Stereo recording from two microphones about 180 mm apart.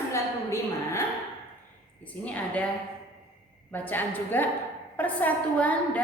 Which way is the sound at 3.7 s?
10° left (ahead or behind).